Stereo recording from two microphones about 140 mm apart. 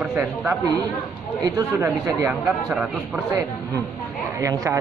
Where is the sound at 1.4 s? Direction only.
20° right (ahead or behind).